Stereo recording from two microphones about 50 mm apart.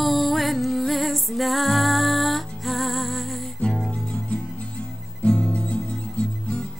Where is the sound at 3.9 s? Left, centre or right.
Left.